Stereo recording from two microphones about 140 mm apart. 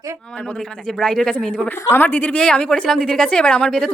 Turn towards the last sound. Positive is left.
turn(degrees=5)  # may be behind; listen again after turning